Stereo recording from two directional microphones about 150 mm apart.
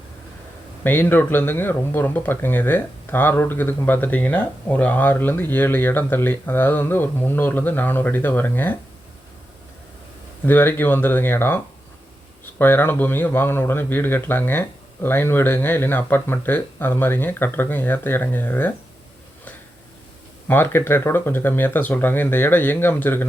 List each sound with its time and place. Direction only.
0.9 s speech: 15° left (ahead or behind)
10.4 s speech: 15° left (ahead or behind)
20.5 s speech: 15° left (ahead or behind)